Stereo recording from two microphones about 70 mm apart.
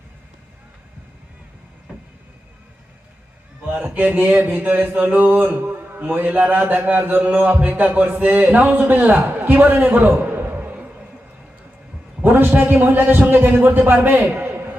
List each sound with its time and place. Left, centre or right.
3.7 s a man's voice: right
12.2 s speech: right